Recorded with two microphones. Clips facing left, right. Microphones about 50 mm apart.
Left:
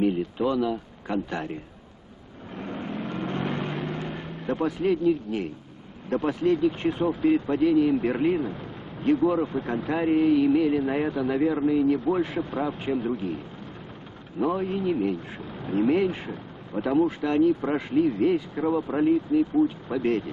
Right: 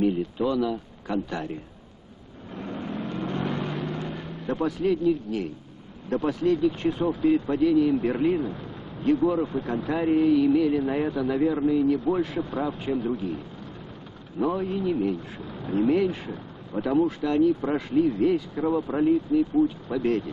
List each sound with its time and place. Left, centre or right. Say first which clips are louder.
0.0 s speech: even; left
2.5 s vehicle: even; centre
6.2 s speech: even; left
14.4 s speech: even; centre